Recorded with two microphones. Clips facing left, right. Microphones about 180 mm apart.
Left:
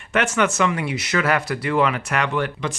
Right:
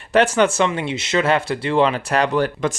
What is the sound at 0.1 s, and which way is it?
Speech, 30° right (ahead or behind).